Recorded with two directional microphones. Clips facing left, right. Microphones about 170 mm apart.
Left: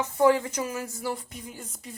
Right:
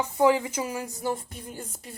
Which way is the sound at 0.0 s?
10° right (ahead or behind).